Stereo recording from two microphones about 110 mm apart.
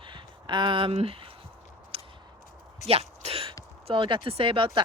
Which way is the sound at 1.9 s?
60° right (ahead or behind).